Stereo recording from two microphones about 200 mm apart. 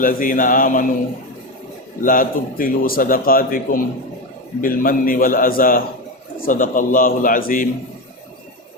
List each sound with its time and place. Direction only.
0.0 s a man's voice: 45° left (ahead or behind)
2.0 s a man's voice: 45° left (ahead or behind)